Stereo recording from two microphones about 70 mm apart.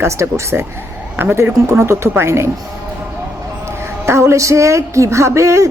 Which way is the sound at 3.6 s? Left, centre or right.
Right.